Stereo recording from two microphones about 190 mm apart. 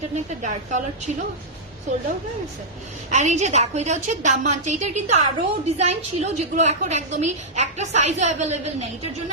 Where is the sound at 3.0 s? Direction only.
40° right (ahead or behind).